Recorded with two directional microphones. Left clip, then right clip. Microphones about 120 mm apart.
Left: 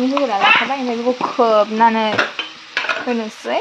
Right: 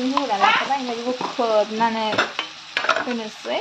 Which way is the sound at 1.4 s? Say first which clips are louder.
Left 7 dB; 35° left (ahead or behind).